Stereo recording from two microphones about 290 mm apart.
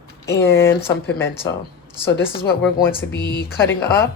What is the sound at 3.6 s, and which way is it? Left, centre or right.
Speech, centre.